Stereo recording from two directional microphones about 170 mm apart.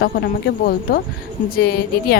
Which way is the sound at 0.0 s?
70° left (ahead or behind).